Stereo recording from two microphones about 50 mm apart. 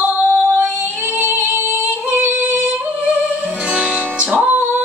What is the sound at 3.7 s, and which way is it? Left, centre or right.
Music, right.